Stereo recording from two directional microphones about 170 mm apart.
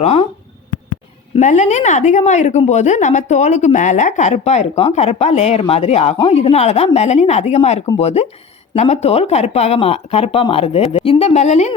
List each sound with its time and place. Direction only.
0.0 s speech: 35° left (ahead or behind)
1.4 s speech: 45° left (ahead or behind)